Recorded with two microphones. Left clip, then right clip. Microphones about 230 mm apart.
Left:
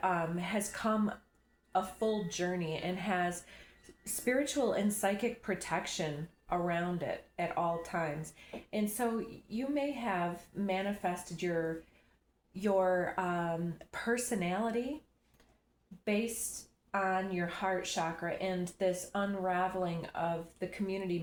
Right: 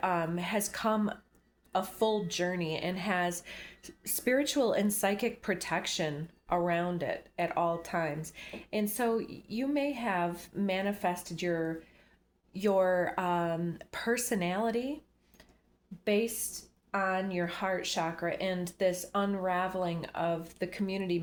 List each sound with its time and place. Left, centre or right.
0.0 s speech: right
16.0 s speech: right